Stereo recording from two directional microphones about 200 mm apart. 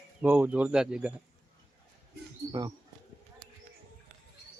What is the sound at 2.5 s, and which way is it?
Speech, 20° right (ahead or behind).